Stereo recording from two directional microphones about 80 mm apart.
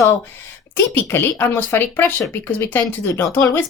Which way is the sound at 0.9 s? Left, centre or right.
Left.